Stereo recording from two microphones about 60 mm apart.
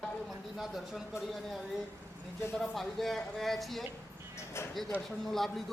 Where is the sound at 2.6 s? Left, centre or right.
Centre.